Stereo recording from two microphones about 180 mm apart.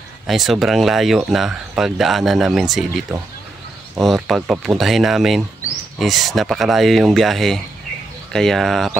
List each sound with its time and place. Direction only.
0.3 s speech: centre (ahead or behind)